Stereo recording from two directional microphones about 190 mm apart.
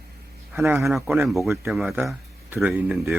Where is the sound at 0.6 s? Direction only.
10° right (ahead or behind).